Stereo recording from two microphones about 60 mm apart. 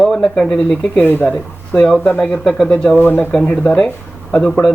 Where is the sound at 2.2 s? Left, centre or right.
Centre.